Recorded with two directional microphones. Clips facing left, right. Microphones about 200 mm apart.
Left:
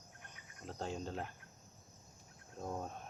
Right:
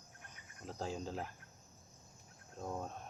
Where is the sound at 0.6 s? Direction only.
Centre (ahead or behind).